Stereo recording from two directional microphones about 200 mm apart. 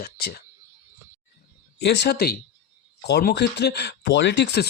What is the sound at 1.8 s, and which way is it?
Speech, 60° left (ahead or behind).